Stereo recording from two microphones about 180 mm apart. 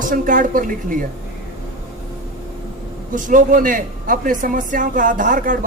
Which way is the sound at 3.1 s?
45° right (ahead or behind).